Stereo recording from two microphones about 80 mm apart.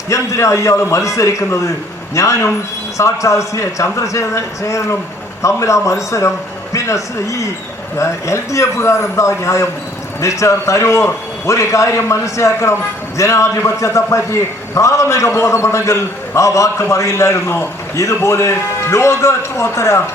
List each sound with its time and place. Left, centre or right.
0.1 s a man's voice: left